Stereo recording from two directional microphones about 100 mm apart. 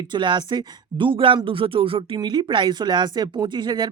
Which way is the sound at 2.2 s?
50° right (ahead or behind).